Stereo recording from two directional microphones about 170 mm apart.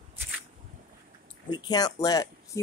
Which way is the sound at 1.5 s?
25° left (ahead or behind).